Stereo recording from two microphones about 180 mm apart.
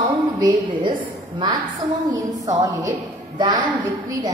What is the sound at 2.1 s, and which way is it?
A woman's voice, 20° right (ahead or behind).